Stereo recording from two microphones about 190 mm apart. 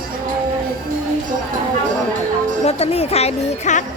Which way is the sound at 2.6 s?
35° left (ahead or behind).